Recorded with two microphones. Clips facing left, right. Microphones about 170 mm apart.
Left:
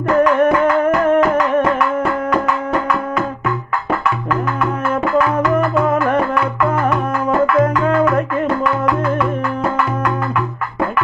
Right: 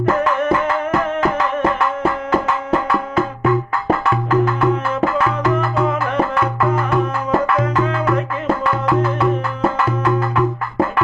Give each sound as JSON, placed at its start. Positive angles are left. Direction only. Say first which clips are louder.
{"t": 0.3, "sound": "music", "louder": "left 5 dB", "side_deg": 50}